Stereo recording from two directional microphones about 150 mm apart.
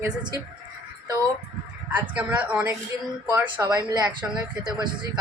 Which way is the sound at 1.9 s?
10° right (ahead or behind).